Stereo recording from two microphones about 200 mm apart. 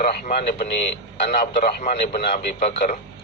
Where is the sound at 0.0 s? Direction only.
45° left (ahead or behind).